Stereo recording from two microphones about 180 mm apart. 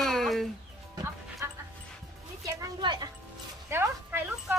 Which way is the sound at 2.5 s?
20° right (ahead or behind).